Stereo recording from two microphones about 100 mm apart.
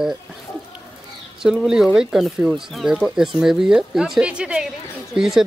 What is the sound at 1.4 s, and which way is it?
Speech, 5° right (ahead or behind).